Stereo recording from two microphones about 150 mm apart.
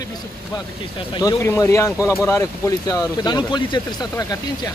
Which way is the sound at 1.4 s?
20° left (ahead or behind).